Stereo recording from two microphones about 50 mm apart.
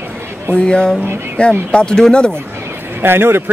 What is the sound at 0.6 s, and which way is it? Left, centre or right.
Speech, centre.